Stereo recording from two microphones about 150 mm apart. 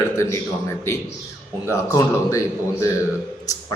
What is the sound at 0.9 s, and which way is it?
A man's voice, 15° left (ahead or behind).